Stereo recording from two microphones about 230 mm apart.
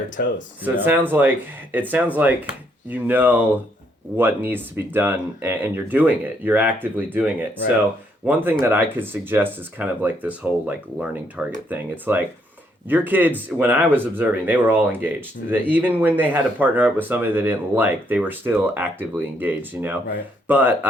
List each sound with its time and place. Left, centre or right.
0.2 s speech: left
0.6 s speech: centre